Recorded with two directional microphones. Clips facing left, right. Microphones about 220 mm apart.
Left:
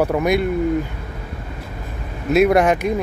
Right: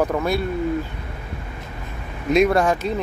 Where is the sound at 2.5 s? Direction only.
20° left (ahead or behind).